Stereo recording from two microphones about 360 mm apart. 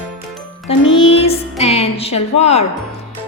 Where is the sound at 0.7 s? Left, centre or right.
Centre.